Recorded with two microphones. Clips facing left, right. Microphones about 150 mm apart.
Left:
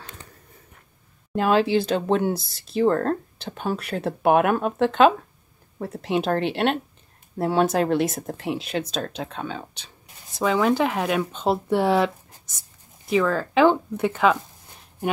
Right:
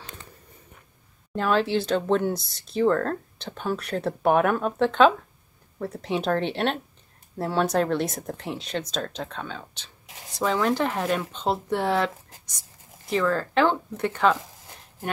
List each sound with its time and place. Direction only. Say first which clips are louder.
1.3 s speech: left 4 dB; 15° left (ahead or behind)
2.9 s speech: left 2 dB; 20° left (ahead or behind)
3.3 s speech: left 1 dB; 10° left (ahead or behind)
7.3 s speech: left 3 dB; 15° left (ahead or behind)
10.3 s speech: left 3 dB; centre (ahead or behind)
13.1 s speech: left 2 dB; centre (ahead or behind)